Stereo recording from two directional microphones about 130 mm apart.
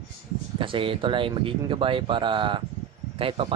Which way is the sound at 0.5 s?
40° right (ahead or behind).